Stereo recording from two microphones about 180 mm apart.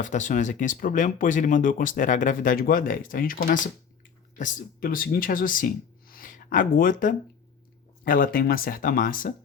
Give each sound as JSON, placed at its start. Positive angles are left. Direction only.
{"t": 0.0, "sound": "speech", "side_deg": 45}